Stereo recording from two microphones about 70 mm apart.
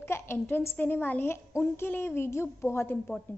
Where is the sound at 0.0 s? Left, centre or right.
Left.